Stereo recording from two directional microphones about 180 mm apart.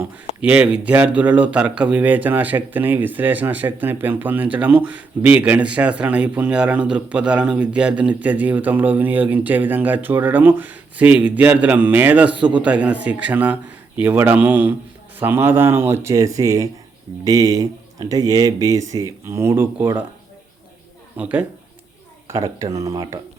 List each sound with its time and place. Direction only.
0.0 s speech: 10° right (ahead or behind)
12.3 s speech: 25° right (ahead or behind)
12.5 s speech: 5° right (ahead or behind)
21.2 s speech: 10° right (ahead or behind)